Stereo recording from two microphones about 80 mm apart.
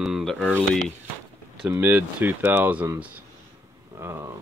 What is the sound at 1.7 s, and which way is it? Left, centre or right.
Speech, right.